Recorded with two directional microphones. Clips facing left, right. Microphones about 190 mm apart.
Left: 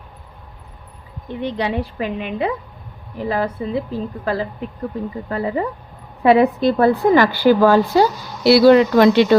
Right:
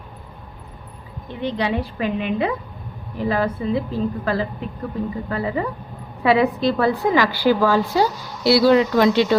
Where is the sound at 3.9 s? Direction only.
15° left (ahead or behind).